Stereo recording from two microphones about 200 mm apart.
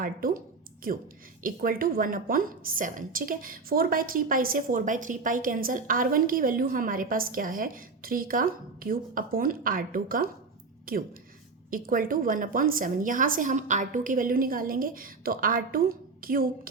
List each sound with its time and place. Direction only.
0.0 s a woman's voice: 45° right (ahead or behind)